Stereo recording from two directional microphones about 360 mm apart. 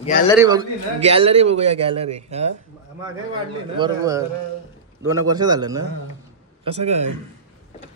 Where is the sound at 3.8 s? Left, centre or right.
Centre.